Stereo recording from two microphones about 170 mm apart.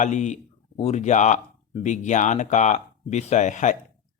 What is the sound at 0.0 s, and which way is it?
Speech, 45° left (ahead or behind).